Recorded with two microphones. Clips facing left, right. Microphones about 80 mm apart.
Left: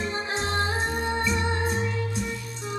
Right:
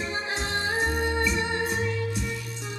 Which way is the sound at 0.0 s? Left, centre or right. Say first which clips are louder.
Left 2 dB; left.